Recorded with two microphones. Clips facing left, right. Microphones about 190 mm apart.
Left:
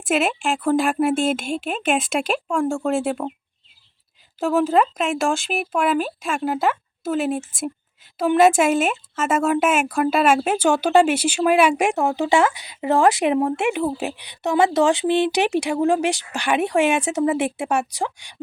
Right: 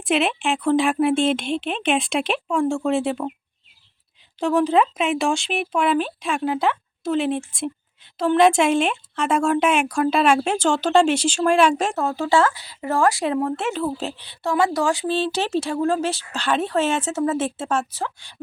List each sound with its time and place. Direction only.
0.0 s speech: centre (ahead or behind)
4.4 s speech: 5° left (ahead or behind)